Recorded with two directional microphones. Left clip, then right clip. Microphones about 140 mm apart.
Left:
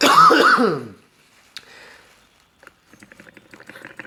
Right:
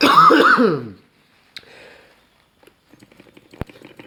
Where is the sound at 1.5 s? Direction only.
50° right (ahead or behind).